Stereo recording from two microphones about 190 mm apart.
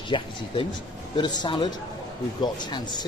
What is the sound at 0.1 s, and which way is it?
Speech, 25° left (ahead or behind).